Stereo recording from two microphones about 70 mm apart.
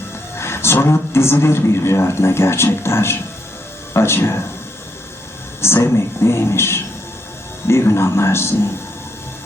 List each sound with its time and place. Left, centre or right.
0.3 s a man's voice: left
5.6 s a man's voice: left